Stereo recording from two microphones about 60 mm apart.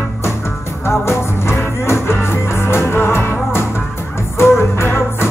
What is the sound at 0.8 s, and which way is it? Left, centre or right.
Music, left.